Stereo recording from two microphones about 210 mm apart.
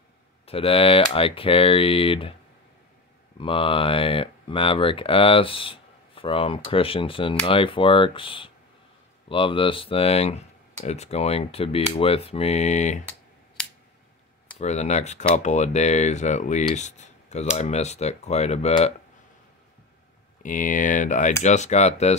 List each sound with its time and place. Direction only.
0.5 s speech: 25° left (ahead or behind)
3.3 s speech: 25° left (ahead or behind)
14.6 s speech: 30° left (ahead or behind)
20.4 s speech: 40° left (ahead or behind)